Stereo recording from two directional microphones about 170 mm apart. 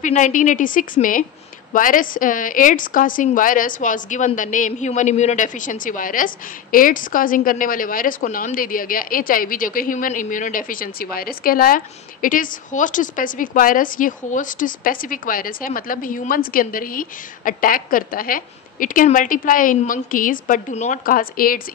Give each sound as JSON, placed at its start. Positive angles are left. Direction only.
{"t": 0.0, "sound": "a woman's voice", "side_deg": 50}